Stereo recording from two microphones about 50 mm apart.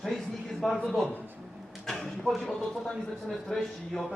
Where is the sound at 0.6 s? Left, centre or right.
Centre.